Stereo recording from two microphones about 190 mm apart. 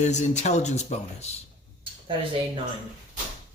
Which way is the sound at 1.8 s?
30° right (ahead or behind).